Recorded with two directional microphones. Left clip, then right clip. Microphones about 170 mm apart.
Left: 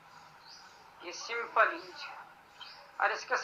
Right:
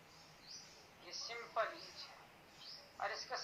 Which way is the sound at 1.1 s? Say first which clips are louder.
Left 10 dB; 15° left (ahead or behind).